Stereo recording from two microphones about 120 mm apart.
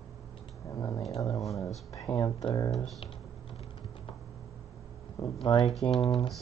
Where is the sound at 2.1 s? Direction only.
35° left (ahead or behind).